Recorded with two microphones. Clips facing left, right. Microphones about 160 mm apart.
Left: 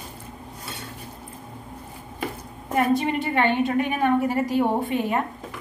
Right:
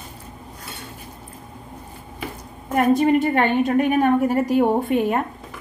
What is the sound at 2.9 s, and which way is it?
A woman's voice, 45° right (ahead or behind).